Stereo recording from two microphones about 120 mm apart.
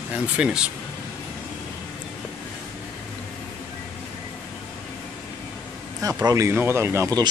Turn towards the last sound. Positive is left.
turn(degrees=-20)  # may be behind; listen again after turning